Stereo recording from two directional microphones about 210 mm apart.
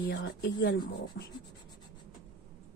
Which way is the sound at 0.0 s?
50° left (ahead or behind).